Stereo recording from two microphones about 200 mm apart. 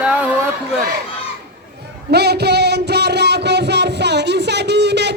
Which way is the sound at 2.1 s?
55° right (ahead or behind).